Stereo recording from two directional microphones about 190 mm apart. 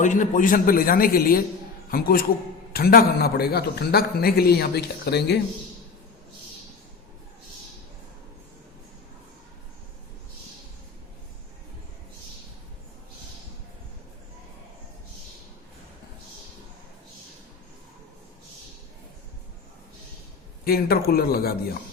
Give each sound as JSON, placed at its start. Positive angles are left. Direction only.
{"t": 0.0, "sound": "a man's voice", "side_deg": 40}
{"t": 20.7, "sound": "a man's voice", "side_deg": 55}